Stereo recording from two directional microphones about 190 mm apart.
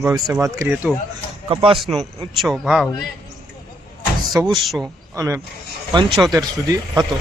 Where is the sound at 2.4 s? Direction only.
Centre (ahead or behind).